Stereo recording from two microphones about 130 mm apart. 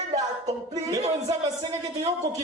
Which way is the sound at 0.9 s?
30° right (ahead or behind).